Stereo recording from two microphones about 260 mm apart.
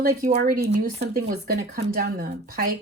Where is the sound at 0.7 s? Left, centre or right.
Right.